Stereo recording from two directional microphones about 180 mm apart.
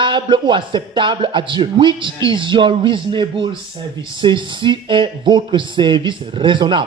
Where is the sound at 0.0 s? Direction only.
25° right (ahead or behind).